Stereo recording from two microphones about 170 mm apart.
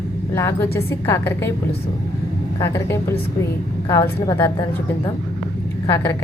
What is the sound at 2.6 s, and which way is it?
A woman's voice, 15° left (ahead or behind).